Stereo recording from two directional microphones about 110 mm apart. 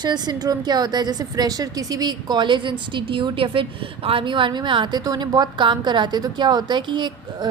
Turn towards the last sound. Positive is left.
turn(degrees=-40)  # may be behind; listen again after turning